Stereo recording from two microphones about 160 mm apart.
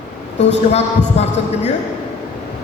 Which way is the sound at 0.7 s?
40° left (ahead or behind).